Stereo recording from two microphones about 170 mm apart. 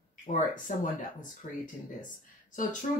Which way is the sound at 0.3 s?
45° left (ahead or behind).